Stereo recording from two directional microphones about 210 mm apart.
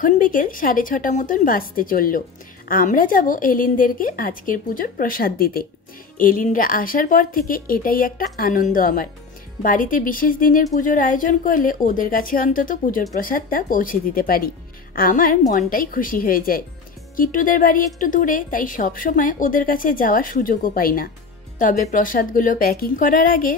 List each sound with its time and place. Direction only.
0.0 s a woman's voice: 40° left (ahead or behind)